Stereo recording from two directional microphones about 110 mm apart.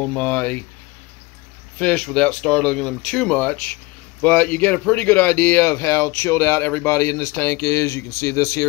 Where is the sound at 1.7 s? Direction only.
10° left (ahead or behind).